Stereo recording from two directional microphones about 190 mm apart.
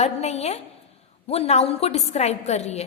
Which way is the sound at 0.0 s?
35° left (ahead or behind).